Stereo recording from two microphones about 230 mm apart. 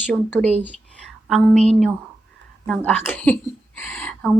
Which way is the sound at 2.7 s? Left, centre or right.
Centre.